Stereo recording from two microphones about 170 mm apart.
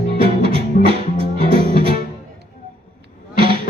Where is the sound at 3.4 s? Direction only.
30° right (ahead or behind).